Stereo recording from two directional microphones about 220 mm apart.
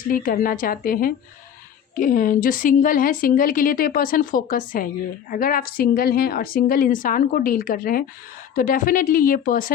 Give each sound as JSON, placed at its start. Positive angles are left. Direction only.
{"t": 0.0, "sound": "a woman's voice", "side_deg": 40}